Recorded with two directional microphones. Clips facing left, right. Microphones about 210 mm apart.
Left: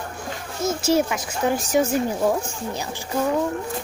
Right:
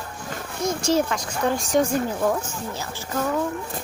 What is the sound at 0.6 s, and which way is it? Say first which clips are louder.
Speech: left 1 dB; 5° left (ahead or behind).